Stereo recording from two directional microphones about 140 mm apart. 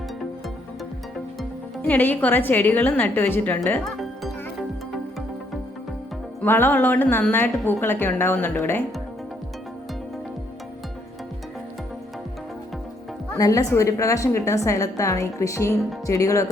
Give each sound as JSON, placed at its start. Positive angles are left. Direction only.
{"t": 1.9, "sound": "a woman's voice", "side_deg": 10}
{"t": 6.4, "sound": "a woman's voice", "side_deg": 15}
{"t": 13.3, "sound": "a woman's voice", "side_deg": 25}